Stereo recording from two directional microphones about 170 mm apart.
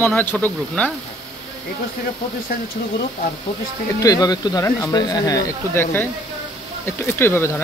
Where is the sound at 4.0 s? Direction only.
20° left (ahead or behind).